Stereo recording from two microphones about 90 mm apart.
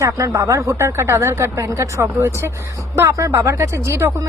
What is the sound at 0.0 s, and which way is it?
A woman's voice, 35° right (ahead or behind).